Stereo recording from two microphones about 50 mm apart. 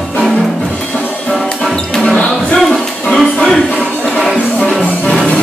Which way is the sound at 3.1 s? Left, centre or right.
Centre.